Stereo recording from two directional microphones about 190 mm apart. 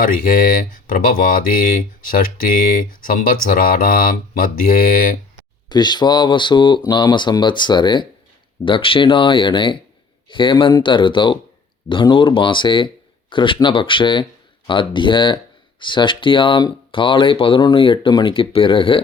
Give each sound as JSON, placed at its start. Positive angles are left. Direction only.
{"t": 0.0, "sound": "speech", "side_deg": 45}
{"t": 5.6, "sound": "speech", "side_deg": 20}